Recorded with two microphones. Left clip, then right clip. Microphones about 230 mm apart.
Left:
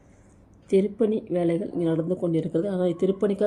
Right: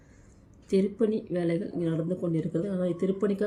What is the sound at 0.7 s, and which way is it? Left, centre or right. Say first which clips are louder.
Speech: left 4 dB; centre.